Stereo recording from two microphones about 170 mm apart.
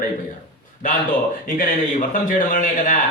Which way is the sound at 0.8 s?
50° left (ahead or behind).